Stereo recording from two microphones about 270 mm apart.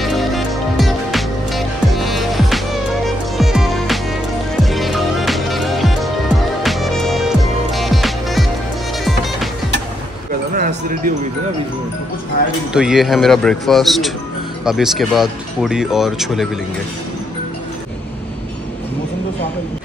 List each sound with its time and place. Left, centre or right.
0.0 s music: centre
10.5 s a sound: right
12.7 s speech: centre